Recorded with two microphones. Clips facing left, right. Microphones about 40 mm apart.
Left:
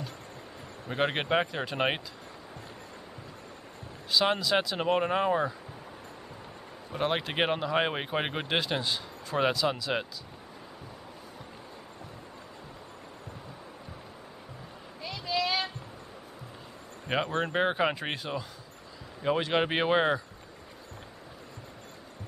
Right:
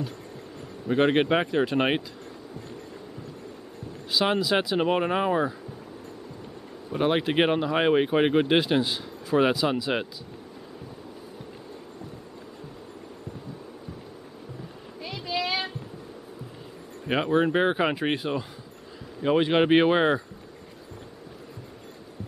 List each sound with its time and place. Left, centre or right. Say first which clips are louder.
0.8 s speech: right 7 dB; centre
4.1 s speech: right 2 dB; centre
6.9 s speech: right 6 dB; centre
15.0 s a sound: right 1 dB; centre
17.1 s speech: right 6 dB; centre